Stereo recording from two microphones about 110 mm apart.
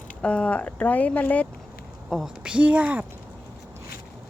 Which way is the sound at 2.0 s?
Centre (ahead or behind).